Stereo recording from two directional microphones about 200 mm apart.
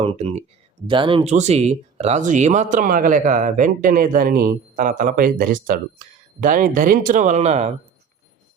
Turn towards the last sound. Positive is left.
turn(degrees=-35)  # may be behind; listen again after turning